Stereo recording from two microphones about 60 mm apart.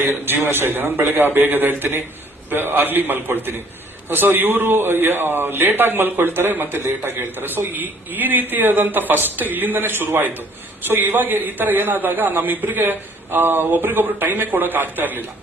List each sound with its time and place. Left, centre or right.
0.0 s a man's voice: right